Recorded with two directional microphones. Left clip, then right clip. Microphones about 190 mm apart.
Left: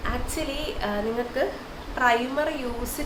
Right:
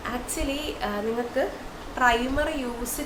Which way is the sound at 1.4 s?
5° left (ahead or behind).